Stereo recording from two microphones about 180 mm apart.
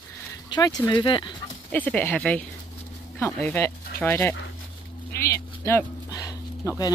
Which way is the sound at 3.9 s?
10° left (ahead or behind).